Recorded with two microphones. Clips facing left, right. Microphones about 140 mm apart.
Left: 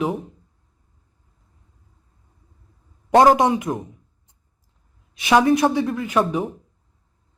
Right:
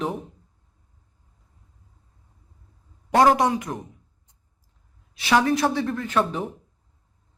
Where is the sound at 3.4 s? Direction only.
20° left (ahead or behind).